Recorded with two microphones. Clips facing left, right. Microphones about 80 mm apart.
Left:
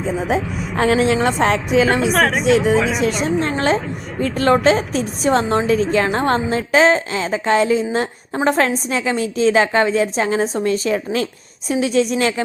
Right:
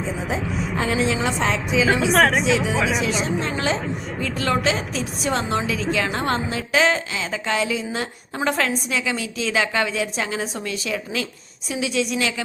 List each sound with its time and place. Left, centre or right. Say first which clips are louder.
0.5 s speech: even; centre
0.8 s a woman's voice: left 7 dB; left
2.0 s speech: left 1 dB; centre
4.2 s a woman's voice: left 8 dB; left